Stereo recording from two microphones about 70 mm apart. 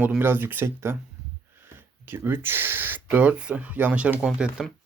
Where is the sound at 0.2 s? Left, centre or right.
Right.